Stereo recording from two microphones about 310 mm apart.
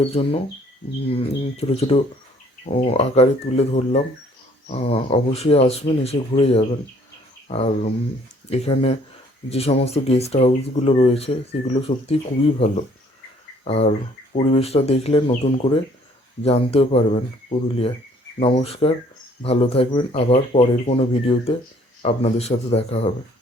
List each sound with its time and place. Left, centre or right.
0.0 s speech: centre
18.3 s speech: centre